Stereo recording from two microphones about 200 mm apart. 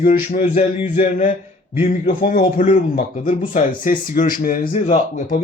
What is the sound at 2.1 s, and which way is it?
Speech, 50° left (ahead or behind).